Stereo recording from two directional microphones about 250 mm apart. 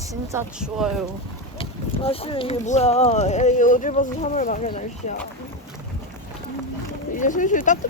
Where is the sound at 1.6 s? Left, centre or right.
Left.